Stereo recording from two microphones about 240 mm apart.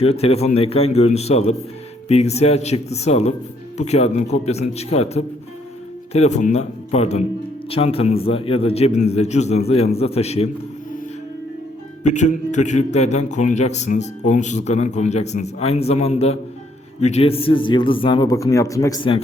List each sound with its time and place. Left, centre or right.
0.0 s a man's voice: left
12.0 s a man's voice: left